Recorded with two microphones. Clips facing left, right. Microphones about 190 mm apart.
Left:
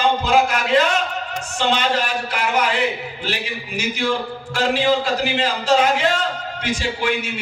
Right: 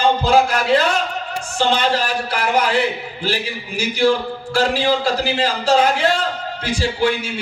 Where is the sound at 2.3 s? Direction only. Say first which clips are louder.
Right 2 dB; 35° right (ahead or behind).